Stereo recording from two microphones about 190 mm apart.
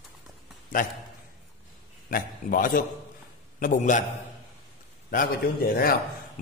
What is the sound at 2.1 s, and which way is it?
A man's voice, 45° left (ahead or behind).